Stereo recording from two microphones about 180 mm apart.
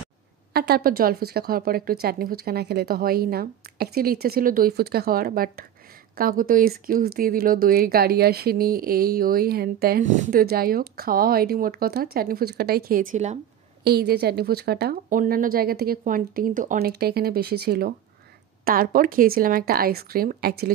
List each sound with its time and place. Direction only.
0.5 s a woman's voice: 60° right (ahead or behind); by 13.4 s 40° right (ahead or behind)
13.8 s a woman's voice: 60° right (ahead or behind)